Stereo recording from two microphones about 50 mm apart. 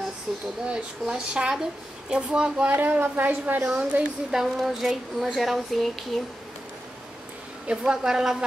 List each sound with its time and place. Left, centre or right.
0.3 s speech: centre
2.7 s a woman's voice: right
4.3 s speech: centre
7.6 s speech: centre